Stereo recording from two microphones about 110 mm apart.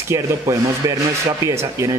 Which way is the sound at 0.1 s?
30° right (ahead or behind).